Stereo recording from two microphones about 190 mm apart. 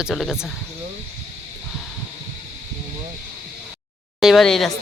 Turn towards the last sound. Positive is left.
turn(degrees=0)  # may be behind; listen again after turning